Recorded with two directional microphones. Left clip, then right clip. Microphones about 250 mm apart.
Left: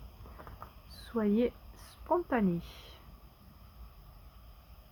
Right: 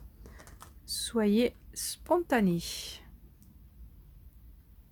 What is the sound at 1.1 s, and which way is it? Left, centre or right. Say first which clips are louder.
Speech: right 3 dB; right.